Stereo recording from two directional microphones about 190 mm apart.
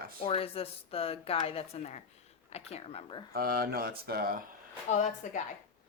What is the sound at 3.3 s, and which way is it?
Speech, 50° right (ahead or behind).